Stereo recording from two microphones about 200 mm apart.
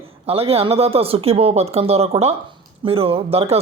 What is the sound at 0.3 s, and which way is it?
Speech, 30° right (ahead or behind).